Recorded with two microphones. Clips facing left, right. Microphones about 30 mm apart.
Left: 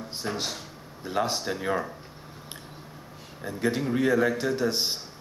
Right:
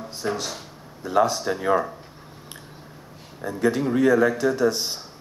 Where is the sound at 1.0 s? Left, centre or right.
Left.